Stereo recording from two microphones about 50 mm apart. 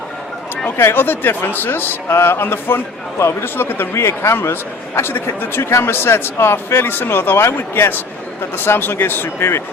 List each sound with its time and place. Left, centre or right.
0.8 s speech: left
3.9 s a man's voice: left
4.9 s speech: left